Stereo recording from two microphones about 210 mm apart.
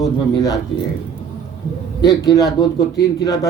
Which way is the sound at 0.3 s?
15° left (ahead or behind).